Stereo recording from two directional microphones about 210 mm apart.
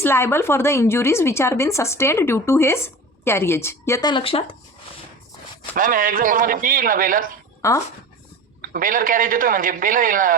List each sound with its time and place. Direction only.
0.0 s a woman's voice: 10° left (ahead or behind)
5.7 s a man's voice: 40° right (ahead or behind)
7.6 s a woman's voice: 15° left (ahead or behind)
8.7 s a man's voice: 40° right (ahead or behind)